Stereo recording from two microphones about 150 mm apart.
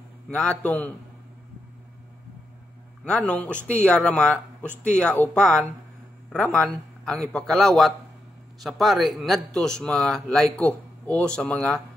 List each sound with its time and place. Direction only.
0.3 s speech: 5° left (ahead or behind)
3.1 s a man's voice: 10° left (ahead or behind)